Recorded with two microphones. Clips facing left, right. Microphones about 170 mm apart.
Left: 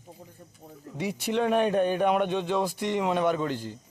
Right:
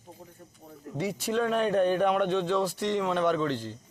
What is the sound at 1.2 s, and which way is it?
Speech, 20° left (ahead or behind).